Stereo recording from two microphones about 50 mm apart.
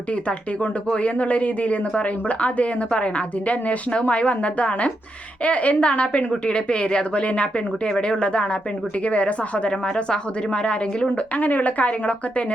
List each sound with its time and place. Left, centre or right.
0.3 s speech: left
11.3 s speech: left